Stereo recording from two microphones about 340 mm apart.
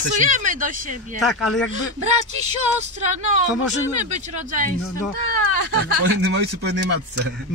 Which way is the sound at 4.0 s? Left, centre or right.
Right.